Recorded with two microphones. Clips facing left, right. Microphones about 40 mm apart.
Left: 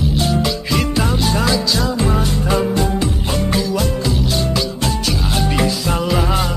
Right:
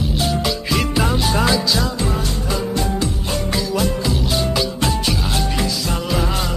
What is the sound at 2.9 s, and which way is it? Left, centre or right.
Music, left.